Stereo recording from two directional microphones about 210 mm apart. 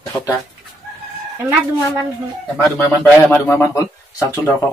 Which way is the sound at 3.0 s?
5° left (ahead or behind).